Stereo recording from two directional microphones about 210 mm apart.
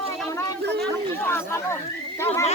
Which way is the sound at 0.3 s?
5° left (ahead or behind).